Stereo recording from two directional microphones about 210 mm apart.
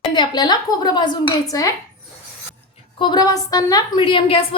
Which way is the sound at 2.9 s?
20° left (ahead or behind).